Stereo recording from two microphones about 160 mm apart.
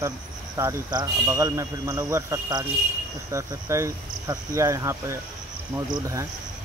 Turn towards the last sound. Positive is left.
turn(degrees=-20)  # may be behind; listen again after turning